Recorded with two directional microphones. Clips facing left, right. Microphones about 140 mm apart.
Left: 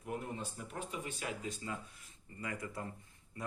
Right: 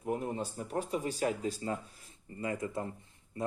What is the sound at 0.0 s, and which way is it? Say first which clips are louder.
Speech: right 7 dB; 35° right (ahead or behind).